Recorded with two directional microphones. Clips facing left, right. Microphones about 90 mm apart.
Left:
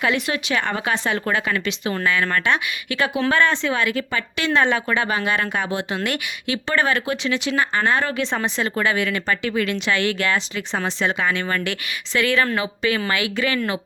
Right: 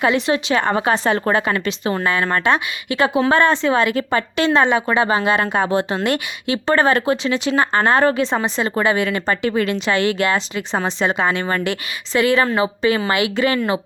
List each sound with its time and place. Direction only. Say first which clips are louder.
0.0 s speech: right 5 dB; 30° right (ahead or behind)